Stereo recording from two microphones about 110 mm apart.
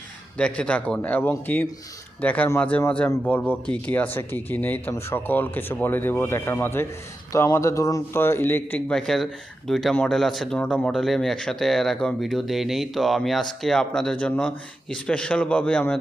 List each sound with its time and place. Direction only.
0.3 s speech: 10° left (ahead or behind)
8.9 s speech: 5° left (ahead or behind)